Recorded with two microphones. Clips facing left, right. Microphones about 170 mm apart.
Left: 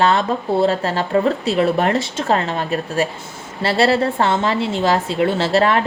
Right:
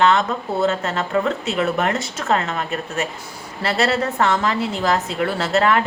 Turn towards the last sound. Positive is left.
turn(degrees=30)  # may be behind; listen again after turning